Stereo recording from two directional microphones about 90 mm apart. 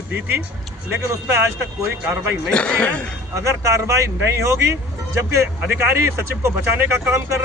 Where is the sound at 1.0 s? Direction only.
30° right (ahead or behind).